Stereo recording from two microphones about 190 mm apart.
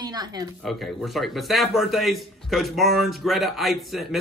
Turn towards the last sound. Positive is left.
turn(degrees=0)  # may be behind; listen again after turning